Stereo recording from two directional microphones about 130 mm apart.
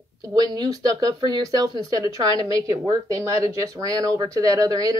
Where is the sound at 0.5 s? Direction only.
30° right (ahead or behind).